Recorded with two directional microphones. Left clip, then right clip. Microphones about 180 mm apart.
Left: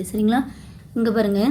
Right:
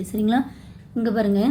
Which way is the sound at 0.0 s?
5° left (ahead or behind).